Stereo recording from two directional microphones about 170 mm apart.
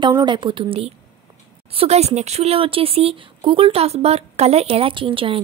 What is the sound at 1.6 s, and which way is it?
Speech, 35° right (ahead or behind).